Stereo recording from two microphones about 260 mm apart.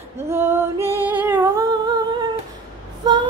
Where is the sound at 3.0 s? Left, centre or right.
Centre.